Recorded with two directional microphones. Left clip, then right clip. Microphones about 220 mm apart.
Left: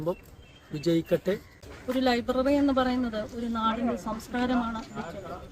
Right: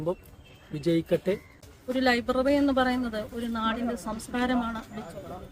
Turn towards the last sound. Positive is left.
turn(degrees=0)  # may be behind; listen again after turning